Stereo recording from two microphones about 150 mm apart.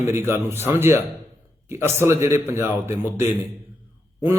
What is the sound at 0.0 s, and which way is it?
Speech, 15° right (ahead or behind).